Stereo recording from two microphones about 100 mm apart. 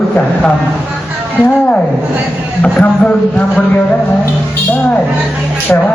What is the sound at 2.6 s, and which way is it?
A man's voice, 15° left (ahead or behind).